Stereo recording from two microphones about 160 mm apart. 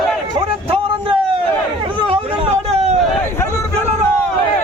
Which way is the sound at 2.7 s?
40° right (ahead or behind).